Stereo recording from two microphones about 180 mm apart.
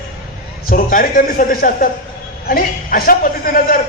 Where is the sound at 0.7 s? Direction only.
50° left (ahead or behind).